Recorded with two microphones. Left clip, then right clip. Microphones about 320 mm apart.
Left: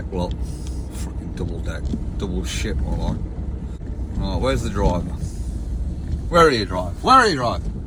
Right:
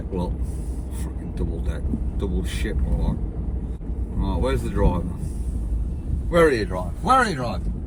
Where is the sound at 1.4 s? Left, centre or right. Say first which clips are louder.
Left 2 dB; centre.